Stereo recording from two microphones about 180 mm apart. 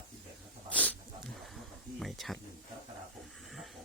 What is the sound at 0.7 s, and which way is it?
Dog, 10° left (ahead or behind).